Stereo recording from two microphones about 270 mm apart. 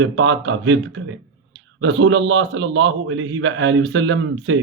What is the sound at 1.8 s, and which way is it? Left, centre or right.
A man's voice, right.